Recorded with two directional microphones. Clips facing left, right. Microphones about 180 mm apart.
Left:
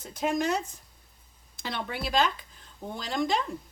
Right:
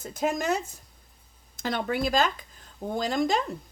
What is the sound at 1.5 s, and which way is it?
Speech, 45° right (ahead or behind).